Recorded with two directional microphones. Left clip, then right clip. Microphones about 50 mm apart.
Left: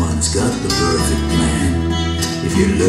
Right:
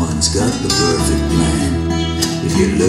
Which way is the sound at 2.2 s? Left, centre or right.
Centre.